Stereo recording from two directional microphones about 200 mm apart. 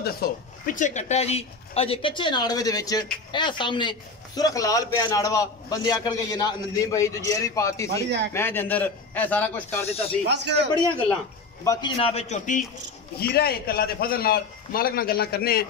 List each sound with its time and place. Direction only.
0.0 s a man's voice: 45° left (ahead or behind); by 9.8 s 10° left (ahead or behind)
10.2 s a man's voice: 60° right (ahead or behind)
11.6 s a man's voice: 15° left (ahead or behind)
12.0 s a man's voice: 30° left (ahead or behind)
13.2 s a man's voice: 50° left (ahead or behind)